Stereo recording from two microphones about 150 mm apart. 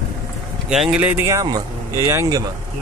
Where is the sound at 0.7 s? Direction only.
5° right (ahead or behind); by 2.4 s 20° right (ahead or behind).